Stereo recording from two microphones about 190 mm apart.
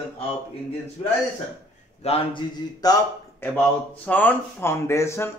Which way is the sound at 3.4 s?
10° left (ahead or behind).